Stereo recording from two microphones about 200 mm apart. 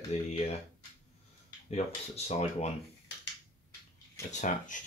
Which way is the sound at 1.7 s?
30° left (ahead or behind).